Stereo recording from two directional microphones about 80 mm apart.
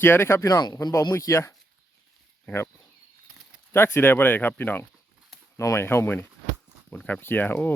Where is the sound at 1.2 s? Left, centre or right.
Left.